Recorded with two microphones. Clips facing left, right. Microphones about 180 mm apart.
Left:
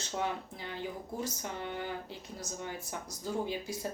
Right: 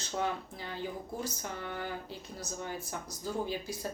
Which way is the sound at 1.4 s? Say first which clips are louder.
Left 1 dB; 20° left (ahead or behind).